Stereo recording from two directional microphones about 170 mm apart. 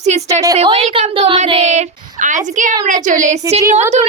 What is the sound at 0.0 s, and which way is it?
A woman's voice, 40° right (ahead or behind).